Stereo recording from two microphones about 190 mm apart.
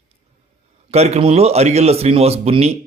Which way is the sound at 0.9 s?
35° right (ahead or behind).